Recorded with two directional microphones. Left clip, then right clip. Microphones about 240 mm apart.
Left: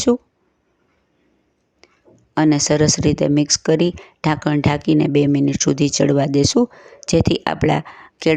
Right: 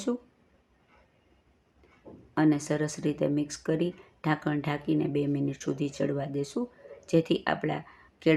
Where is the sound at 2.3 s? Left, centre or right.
Left.